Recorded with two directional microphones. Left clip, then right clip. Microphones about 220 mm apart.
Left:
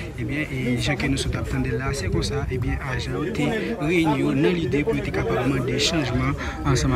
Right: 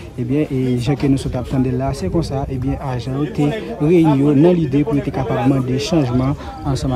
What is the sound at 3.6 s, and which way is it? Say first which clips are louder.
A man's voice: right 9 dB; 30° right (ahead or behind).